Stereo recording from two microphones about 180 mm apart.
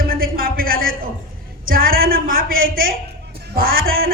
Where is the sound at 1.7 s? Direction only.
55° right (ahead or behind).